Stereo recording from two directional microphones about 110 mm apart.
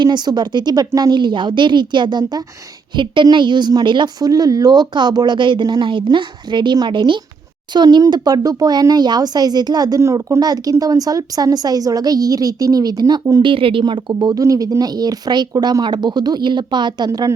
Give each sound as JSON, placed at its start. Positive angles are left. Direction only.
{"t": 0.0, "sound": "a woman's voice", "side_deg": -40}
{"t": 13.4, "sound": "speech", "side_deg": -55}